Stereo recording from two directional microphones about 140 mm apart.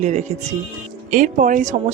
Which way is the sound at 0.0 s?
55° right (ahead or behind).